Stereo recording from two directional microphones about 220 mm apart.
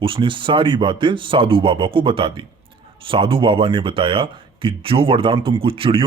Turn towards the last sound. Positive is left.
turn(degrees=-25)  # may be behind; listen again after turning